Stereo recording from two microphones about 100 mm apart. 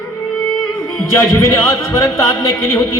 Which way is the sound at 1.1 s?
30° left (ahead or behind).